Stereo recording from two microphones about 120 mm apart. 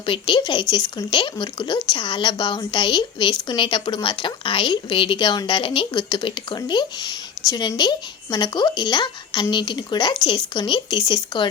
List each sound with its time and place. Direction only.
0.0 s a woman's voice: 45° left (ahead or behind)